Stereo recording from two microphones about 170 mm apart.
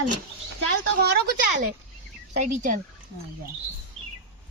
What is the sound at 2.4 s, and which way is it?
Speech, 50° right (ahead or behind).